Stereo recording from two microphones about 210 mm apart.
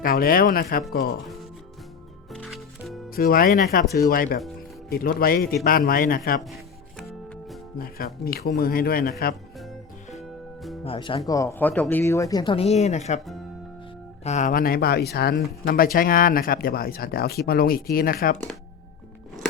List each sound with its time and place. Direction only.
0.0 s speech: 45° left (ahead or behind)
1.2 s speech: centre (ahead or behind)
2.3 s music: centre (ahead or behind)
3.1 s speech: 45° left (ahead or behind)
6.4 s music: centre (ahead or behind)
7.8 s speech: 45° left (ahead or behind)
10.8 s speech: 25° left (ahead or behind)
11.3 s speech: 15° left (ahead or behind); by 13.1 s 30° left (ahead or behind)
14.3 s speech: 35° left (ahead or behind)